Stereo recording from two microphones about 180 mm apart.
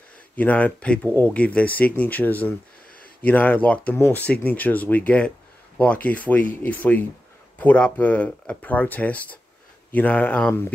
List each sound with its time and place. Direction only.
0.4 s speech: 10° left (ahead or behind)